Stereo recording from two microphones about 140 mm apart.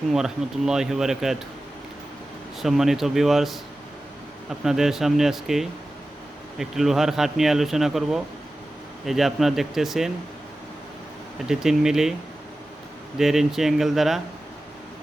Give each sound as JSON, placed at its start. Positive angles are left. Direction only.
{"t": 0.1, "sound": "speech", "side_deg": -5}
{"t": 2.6, "sound": "speech", "side_deg": 0}
{"t": 11.4, "sound": "speech", "side_deg": -5}
{"t": 13.1, "sound": "speech", "side_deg": 0}